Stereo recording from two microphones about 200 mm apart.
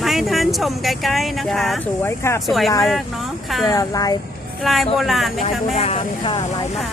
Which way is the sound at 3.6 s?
15° left (ahead or behind).